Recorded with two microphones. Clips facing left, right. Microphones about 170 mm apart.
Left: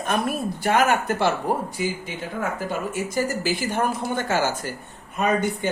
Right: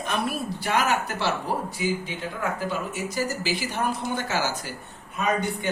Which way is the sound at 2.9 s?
50° left (ahead or behind).